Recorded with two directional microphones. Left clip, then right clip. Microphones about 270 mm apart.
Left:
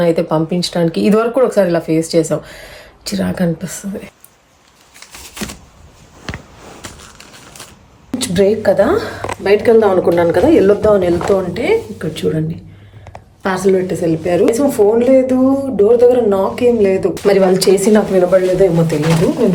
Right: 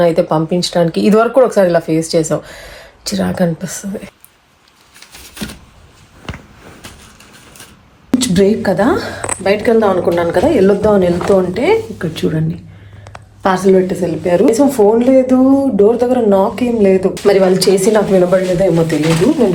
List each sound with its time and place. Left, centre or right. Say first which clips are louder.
0.0 s speech: right 2 dB; centre
4.9 s a sound: left 1 dB; centre
8.1 s a woman's voice: right 1 dB; centre
11.5 s a woman's voice: right 2 dB; centre
13.7 s a woman's voice: left 1 dB; centre